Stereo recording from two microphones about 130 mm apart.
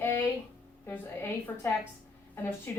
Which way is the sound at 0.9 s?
15° left (ahead or behind).